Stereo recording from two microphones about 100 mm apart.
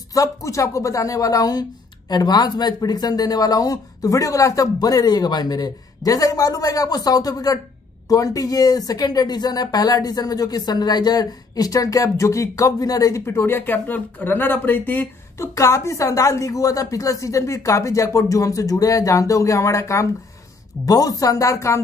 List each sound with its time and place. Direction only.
0.1 s speech: 35° left (ahead or behind)